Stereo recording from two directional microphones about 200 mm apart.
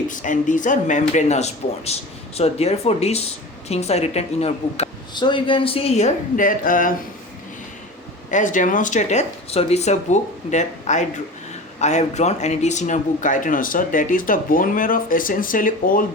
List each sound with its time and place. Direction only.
0.1 s a woman's voice: 40° left (ahead or behind)
8.3 s a woman's voice: 40° left (ahead or behind)